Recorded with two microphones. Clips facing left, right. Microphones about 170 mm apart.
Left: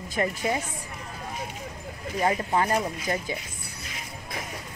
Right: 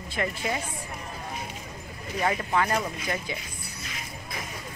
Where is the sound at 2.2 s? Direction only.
25° left (ahead or behind).